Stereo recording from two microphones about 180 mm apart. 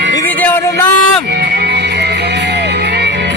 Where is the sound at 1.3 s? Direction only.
65° right (ahead or behind).